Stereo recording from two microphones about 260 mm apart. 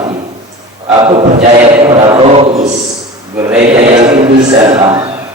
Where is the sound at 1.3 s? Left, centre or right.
Right.